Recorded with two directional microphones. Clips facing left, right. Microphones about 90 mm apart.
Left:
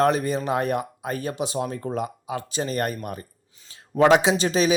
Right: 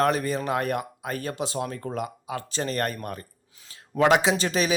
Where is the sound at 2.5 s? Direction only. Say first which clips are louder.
Left 1 dB; 10° left (ahead or behind).